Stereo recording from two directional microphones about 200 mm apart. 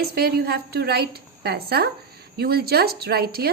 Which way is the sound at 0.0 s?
50° right (ahead or behind).